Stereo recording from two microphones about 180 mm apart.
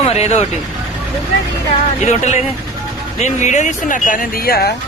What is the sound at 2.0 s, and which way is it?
Speech, 40° left (ahead or behind).